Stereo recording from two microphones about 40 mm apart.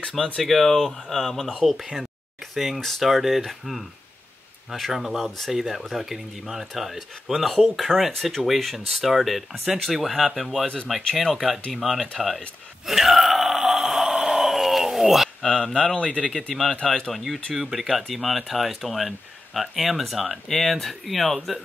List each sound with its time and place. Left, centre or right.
0.4 s speech: centre
2.5 s speech: centre
12.2 s burping: centre
15.4 s speech: centre
16.2 s speech: centre